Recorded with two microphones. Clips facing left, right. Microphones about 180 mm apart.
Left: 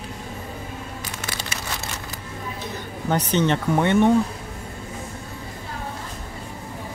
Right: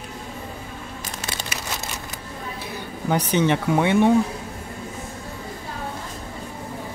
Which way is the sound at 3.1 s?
10° right (ahead or behind).